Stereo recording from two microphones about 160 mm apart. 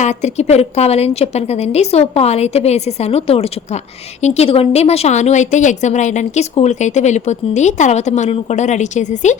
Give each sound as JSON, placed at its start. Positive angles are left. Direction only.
{"t": 0.0, "sound": "a woman's voice", "side_deg": 45}